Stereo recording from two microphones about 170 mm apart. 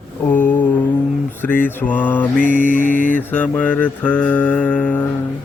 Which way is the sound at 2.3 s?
50° left (ahead or behind).